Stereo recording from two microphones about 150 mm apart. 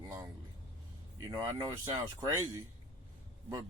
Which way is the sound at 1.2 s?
20° right (ahead or behind).